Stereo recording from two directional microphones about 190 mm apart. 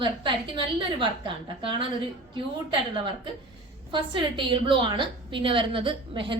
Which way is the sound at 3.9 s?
25° right (ahead or behind).